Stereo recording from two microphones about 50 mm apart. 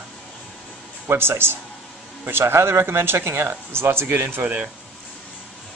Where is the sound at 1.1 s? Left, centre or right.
Right.